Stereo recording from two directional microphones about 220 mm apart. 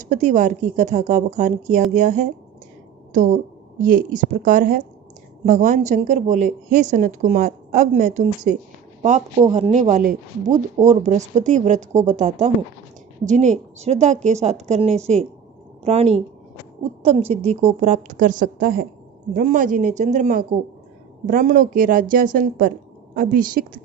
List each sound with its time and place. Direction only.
0.0 s a woman's voice: 35° right (ahead or behind)
8.5 s a woman's voice: 40° right (ahead or behind)
9.5 s a woman's voice: 30° right (ahead or behind)
17.3 s a woman's voice: 30° right (ahead or behind)